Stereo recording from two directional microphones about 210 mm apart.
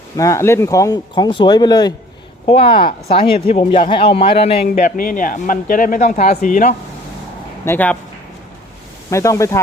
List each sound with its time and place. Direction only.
0.2 s speech: 15° left (ahead or behind)
4.7 s a man's voice: 40° left (ahead or behind)
7.6 s speech: 10° left (ahead or behind)
9.0 s speech: 15° left (ahead or behind)